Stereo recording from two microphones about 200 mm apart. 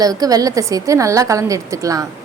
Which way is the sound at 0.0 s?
20° right (ahead or behind).